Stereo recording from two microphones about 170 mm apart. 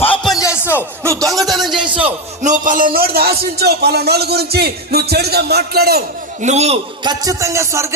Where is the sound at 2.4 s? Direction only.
50° right (ahead or behind); by 6.0 s 65° right (ahead or behind).